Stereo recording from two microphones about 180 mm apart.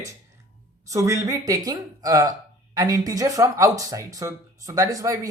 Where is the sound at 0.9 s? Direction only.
15° right (ahead or behind).